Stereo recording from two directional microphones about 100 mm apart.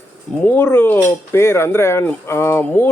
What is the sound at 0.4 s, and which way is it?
Speech, 20° left (ahead or behind).